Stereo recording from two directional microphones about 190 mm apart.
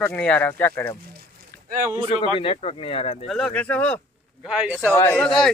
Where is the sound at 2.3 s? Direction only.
30° left (ahead or behind).